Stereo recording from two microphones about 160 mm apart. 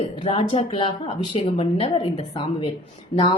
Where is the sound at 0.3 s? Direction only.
40° left (ahead or behind).